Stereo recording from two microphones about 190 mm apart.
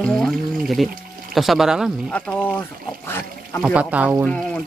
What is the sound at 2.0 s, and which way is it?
Speech, 10° left (ahead or behind).